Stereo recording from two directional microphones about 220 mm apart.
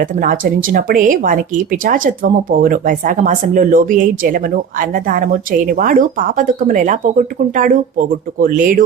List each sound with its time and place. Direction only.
0.0 s speech: 40° right (ahead or behind)